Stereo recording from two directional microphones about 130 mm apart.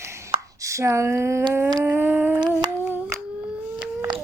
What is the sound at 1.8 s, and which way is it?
Speech, 15° right (ahead or behind).